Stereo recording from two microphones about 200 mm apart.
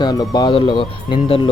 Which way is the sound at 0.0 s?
20° left (ahead or behind).